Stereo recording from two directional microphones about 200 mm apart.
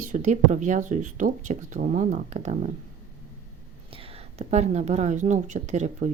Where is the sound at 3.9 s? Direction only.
30° right (ahead or behind).